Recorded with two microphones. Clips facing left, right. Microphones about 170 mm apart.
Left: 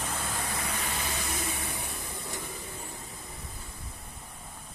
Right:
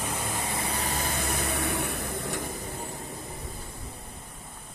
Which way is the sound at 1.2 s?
60° right (ahead or behind).